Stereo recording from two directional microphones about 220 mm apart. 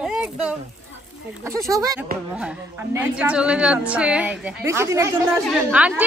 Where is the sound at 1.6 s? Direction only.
15° right (ahead or behind).